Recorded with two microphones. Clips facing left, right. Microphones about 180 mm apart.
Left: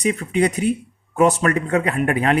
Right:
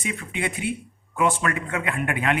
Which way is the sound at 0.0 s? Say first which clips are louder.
Left 10 dB; 40° left (ahead or behind).